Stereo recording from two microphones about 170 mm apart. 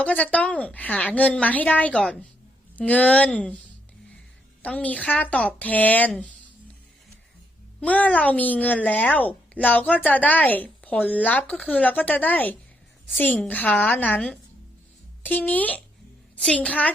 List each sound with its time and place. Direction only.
0.0 s speech: 10° left (ahead or behind)
4.6 s speech: 10° left (ahead or behind)
7.8 s speech: 10° left (ahead or behind)